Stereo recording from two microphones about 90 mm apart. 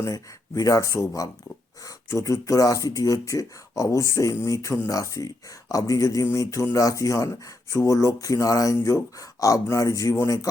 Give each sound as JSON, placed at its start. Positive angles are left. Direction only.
{"t": 0.0, "sound": "speech", "side_deg": 40}